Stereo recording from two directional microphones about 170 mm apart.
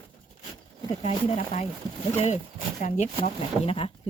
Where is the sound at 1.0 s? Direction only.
40° left (ahead or behind).